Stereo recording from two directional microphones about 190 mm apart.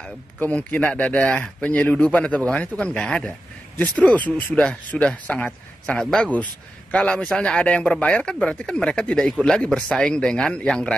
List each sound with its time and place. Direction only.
0.0 s speech: 5° left (ahead or behind)